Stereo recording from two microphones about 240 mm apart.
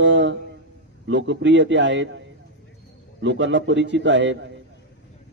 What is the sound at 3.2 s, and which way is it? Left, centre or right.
A man's voice, right.